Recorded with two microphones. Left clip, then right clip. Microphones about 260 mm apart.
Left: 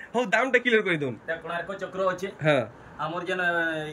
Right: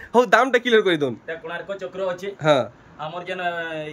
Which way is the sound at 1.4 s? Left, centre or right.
Centre.